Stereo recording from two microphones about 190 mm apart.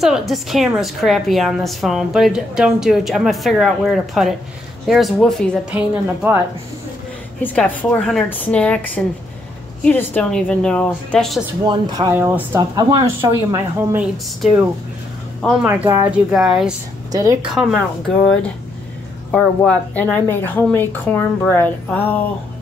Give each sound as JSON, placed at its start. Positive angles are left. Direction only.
{"t": 0.0, "sound": "a woman's voice", "side_deg": 0}
{"t": 5.7, "sound": "speech", "side_deg": -10}
{"t": 7.4, "sound": "a woman's voice", "side_deg": 5}
{"t": 11.6, "sound": "speech", "side_deg": -25}
{"t": 12.1, "sound": "speech", "side_deg": -10}
{"t": 15.7, "sound": "a woman's voice", "side_deg": -10}
{"t": 17.1, "sound": "speech", "side_deg": -20}
{"t": 17.4, "sound": "a woman's voice", "side_deg": 0}